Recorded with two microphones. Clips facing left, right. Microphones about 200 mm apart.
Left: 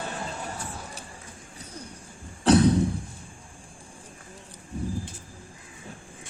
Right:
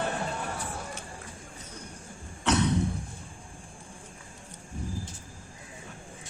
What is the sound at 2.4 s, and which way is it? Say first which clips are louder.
Cough: left 7 dB; 35° left (ahead or behind).